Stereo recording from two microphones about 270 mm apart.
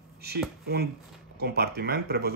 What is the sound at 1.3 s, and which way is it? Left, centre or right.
Speech, right.